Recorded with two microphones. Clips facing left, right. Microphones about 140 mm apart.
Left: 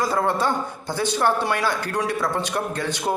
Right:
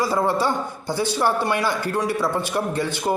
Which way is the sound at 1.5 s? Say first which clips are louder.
Right 1 dB; 5° right (ahead or behind).